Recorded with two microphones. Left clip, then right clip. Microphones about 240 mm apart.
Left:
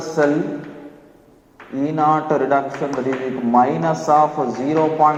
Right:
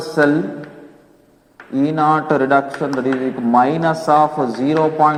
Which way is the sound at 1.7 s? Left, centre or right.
Right.